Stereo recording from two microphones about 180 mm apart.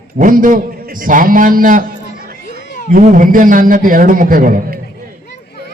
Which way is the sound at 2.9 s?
45° right (ahead or behind).